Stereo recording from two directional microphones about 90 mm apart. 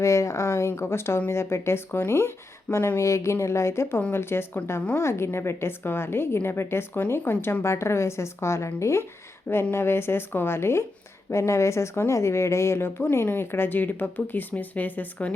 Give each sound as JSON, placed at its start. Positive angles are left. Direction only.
{"t": 0.0, "sound": "a woman's voice", "side_deg": 35}